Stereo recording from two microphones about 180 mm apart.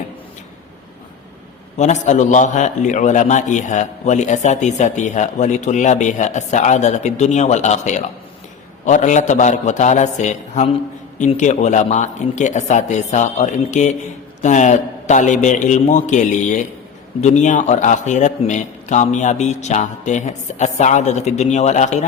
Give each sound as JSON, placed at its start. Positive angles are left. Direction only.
{"t": 1.8, "sound": "a man's voice", "side_deg": 40}